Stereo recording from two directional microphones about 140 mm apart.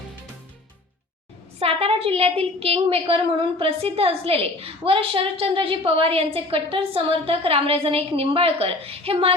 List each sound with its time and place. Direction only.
1.5 s a woman's voice: 45° right (ahead or behind)